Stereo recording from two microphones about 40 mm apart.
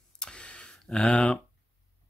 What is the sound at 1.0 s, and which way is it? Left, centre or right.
Speech, left.